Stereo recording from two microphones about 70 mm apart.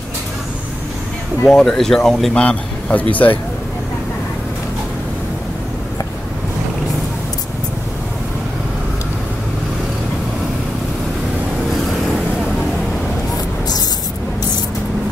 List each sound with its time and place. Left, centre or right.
1.5 s speech: centre
2.4 s speech: left